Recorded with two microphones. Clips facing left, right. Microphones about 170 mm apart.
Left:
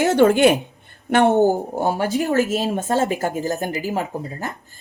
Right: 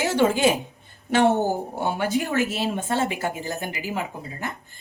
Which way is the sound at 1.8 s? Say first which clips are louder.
Left 4 dB; 40° left (ahead or behind).